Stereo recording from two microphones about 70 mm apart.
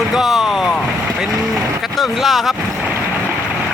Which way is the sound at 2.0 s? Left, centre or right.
Centre.